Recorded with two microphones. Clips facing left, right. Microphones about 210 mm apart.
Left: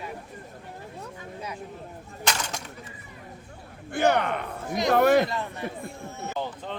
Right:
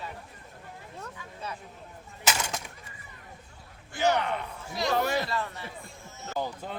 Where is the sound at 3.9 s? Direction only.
55° left (ahead or behind).